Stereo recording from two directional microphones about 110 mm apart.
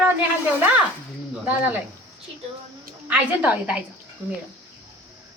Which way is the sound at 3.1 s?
10° right (ahead or behind).